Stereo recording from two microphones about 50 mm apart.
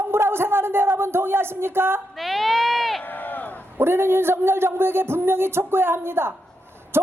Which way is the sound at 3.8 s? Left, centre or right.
Right.